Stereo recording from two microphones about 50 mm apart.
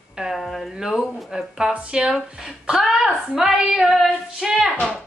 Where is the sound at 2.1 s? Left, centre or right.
Centre.